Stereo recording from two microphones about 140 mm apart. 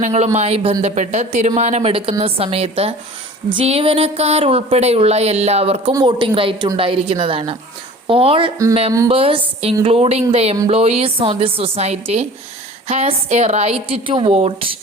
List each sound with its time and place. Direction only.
0.0 s speech: 50° right (ahead or behind)
1.9 s a woman's voice: 40° right (ahead or behind)
5.9 s a woman's voice: 30° right (ahead or behind)